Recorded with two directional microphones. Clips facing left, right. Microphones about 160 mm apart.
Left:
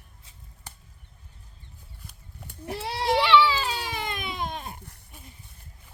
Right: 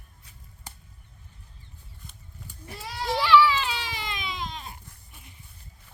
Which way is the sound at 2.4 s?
60° left (ahead or behind).